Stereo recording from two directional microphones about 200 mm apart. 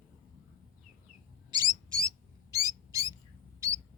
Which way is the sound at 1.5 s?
20° right (ahead or behind).